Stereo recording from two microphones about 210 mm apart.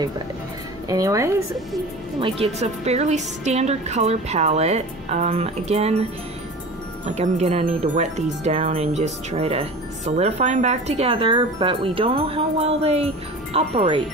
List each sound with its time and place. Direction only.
0.8 s speech: 15° right (ahead or behind)
2.1 s a woman's voice: 25° right (ahead or behind)
7.1 s speech: 30° right (ahead or behind)